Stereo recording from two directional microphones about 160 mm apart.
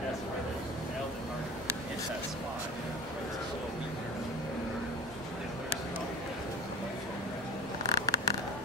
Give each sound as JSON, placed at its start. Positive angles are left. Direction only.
{"t": 7.9, "sound": "scissors", "side_deg": 20}